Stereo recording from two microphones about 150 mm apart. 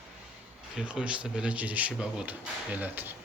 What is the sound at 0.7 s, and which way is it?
Speech, 5° right (ahead or behind).